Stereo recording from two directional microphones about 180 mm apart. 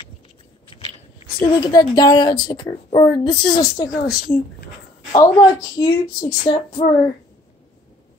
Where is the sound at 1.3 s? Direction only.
20° left (ahead or behind).